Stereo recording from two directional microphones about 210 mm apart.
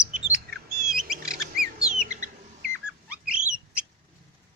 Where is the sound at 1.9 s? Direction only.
35° right (ahead or behind).